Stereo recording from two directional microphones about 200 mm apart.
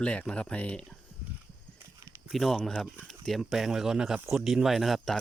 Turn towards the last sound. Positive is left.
turn(degrees=0)  # may be behind; listen again after turning